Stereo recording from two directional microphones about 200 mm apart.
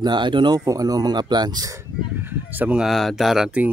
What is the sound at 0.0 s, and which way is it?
Speech, 20° right (ahead or behind).